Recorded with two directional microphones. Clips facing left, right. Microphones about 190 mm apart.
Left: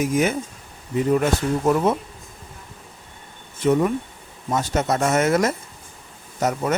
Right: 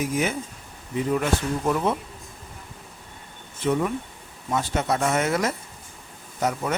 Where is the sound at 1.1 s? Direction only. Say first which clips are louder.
Left 4 dB; 40° left (ahead or behind).